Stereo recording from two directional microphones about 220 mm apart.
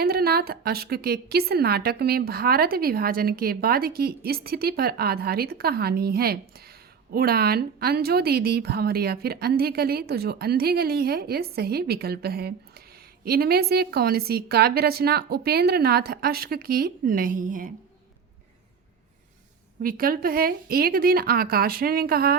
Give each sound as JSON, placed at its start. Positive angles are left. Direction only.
{"t": 0.0, "sound": "a woman's voice", "side_deg": -45}
{"t": 19.8, "sound": "a woman's voice", "side_deg": -40}